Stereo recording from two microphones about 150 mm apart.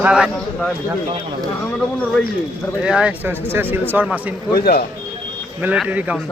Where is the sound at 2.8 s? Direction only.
10° right (ahead or behind).